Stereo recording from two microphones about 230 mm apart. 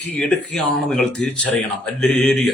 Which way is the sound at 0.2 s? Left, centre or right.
Centre.